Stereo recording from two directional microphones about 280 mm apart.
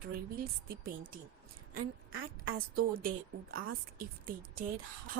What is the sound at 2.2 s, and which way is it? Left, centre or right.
A woman's voice, right.